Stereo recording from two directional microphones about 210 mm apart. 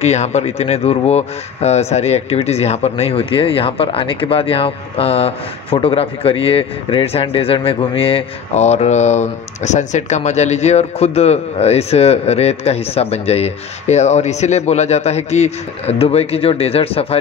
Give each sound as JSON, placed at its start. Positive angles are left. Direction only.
{"t": 0.0, "sound": "speech", "side_deg": 30}